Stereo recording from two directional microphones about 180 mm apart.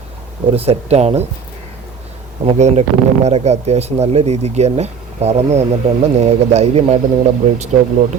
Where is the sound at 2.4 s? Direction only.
35° right (ahead or behind).